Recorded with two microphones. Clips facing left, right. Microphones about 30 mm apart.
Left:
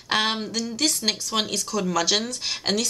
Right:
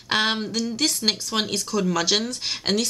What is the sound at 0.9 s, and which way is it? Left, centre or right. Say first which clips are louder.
Speech: right 1 dB; centre.